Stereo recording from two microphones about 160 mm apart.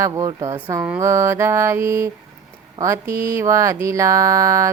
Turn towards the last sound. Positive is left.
turn(degrees=-20)  # may be behind; listen again after turning